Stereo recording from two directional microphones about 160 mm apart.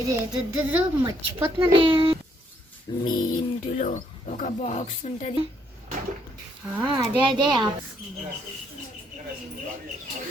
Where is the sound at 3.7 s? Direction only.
50° left (ahead or behind).